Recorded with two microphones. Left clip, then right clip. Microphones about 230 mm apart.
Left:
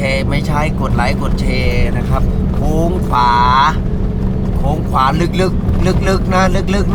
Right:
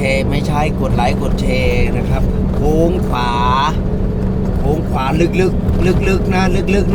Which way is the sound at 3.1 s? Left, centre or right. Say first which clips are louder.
Left 5 dB; left.